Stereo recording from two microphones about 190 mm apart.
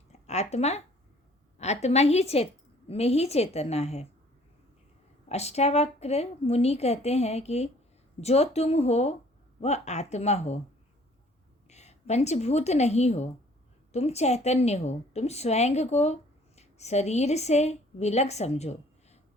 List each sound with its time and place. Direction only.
0.1 s a woman's voice: 35° left (ahead or behind)
5.3 s a woman's voice: 35° left (ahead or behind)
11.7 s a woman's voice: 35° left (ahead or behind)